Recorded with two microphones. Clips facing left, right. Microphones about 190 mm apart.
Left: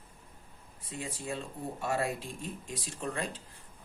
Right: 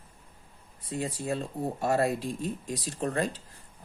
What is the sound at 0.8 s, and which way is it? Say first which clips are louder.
Speech: right 7 dB; 40° right (ahead or behind).